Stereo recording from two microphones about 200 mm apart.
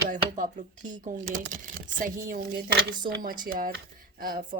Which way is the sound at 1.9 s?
45° right (ahead or behind).